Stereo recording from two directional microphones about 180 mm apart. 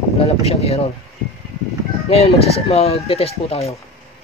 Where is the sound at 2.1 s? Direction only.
35° left (ahead or behind).